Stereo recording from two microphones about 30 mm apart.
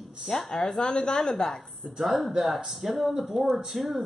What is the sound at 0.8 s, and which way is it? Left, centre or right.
Speech, left.